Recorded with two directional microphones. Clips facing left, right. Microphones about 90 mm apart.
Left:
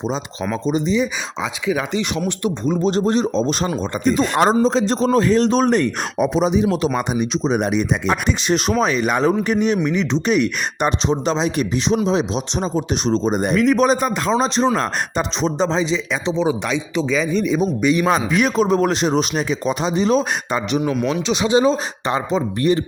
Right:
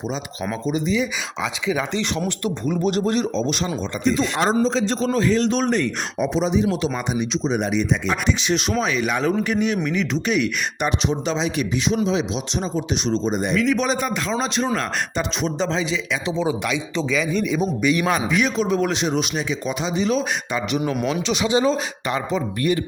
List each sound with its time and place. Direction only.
0.6 s speech: 30° left (ahead or behind)
2.0 s a man's voice: 20° left (ahead or behind)
18.3 s speech: 45° left (ahead or behind)
21.2 s speech: 20° left (ahead or behind)